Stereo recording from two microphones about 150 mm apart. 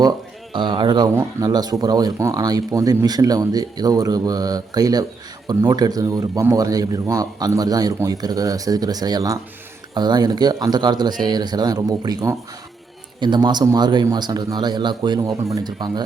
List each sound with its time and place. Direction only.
0.5 s a man's voice: 30° right (ahead or behind)